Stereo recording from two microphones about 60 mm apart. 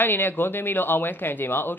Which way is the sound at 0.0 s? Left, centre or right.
Left.